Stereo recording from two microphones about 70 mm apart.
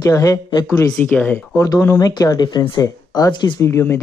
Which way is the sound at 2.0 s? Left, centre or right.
Left.